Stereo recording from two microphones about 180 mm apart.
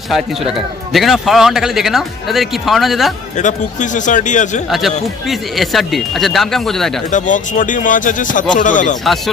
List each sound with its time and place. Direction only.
0.9 s speech: centre (ahead or behind)
3.4 s speech: 45° left (ahead or behind)
5.6 s speech: centre (ahead or behind)
7.1 s speech: 45° left (ahead or behind)